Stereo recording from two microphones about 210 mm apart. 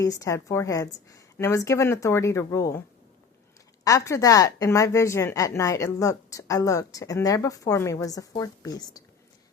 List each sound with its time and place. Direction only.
0.0 s a woman's voice: 15° left (ahead or behind)
3.8 s a woman's voice: 15° left (ahead or behind)